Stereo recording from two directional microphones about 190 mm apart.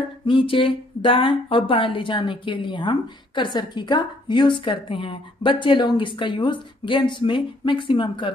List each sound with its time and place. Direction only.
0.2 s speech: 25° left (ahead or behind)